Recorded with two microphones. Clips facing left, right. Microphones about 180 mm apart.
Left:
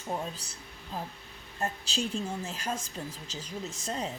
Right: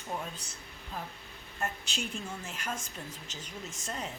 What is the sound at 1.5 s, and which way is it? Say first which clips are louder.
A woman's voice: left 4 dB; 35° left (ahead or behind).